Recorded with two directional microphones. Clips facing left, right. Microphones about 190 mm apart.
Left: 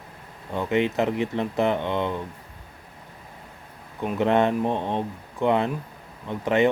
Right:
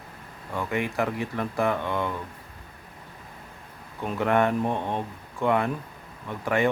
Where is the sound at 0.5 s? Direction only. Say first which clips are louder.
Left 5 dB; 20° left (ahead or behind).